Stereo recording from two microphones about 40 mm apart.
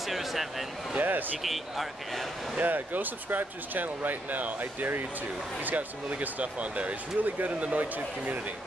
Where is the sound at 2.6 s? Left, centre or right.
Right.